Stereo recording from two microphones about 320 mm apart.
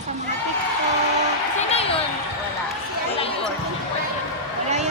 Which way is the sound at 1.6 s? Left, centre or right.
Centre.